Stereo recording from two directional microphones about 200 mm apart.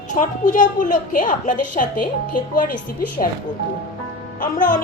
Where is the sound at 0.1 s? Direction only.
40° left (ahead or behind).